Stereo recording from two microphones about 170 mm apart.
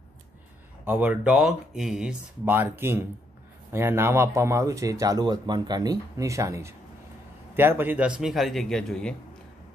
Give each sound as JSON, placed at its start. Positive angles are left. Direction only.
{"t": 0.8, "sound": "a man's voice", "side_deg": -10}